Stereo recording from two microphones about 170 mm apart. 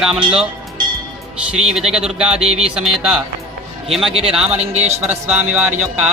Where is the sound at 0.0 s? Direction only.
5° right (ahead or behind).